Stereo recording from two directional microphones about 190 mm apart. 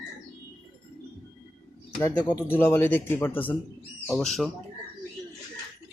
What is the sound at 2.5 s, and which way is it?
A man's voice, 10° left (ahead or behind).